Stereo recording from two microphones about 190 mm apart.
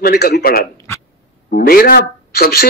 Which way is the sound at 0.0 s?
55° left (ahead or behind).